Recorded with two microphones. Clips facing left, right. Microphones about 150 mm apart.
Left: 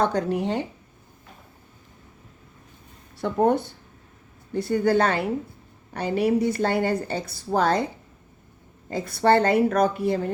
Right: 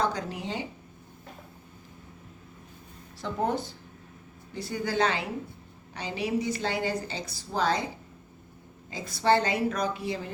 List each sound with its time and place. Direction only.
0.0 s a woman's voice: 55° left (ahead or behind)
3.2 s a woman's voice: 60° left (ahead or behind)
8.9 s a woman's voice: 60° left (ahead or behind)